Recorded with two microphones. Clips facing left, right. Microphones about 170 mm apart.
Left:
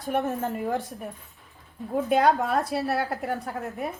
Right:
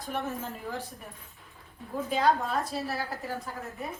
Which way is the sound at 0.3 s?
65° left (ahead or behind).